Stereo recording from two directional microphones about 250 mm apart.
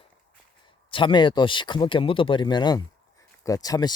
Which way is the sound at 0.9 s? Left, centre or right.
Centre.